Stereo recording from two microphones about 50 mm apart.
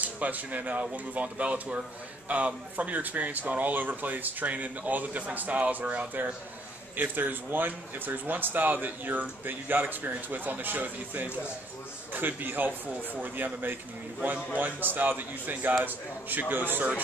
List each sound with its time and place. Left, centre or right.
0.0 s speech: right